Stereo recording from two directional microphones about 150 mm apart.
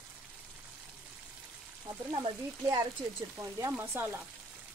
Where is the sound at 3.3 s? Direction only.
20° right (ahead or behind).